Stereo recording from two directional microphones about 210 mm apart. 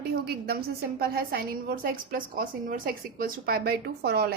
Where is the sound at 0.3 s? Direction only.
50° right (ahead or behind).